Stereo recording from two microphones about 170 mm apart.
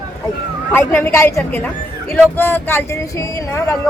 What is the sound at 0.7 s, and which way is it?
Speech, 15° left (ahead or behind).